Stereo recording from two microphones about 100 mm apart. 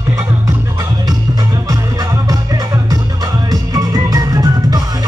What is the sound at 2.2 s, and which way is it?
Music, 35° right (ahead or behind).